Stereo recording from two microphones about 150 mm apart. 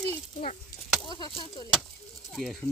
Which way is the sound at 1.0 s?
30° left (ahead or behind).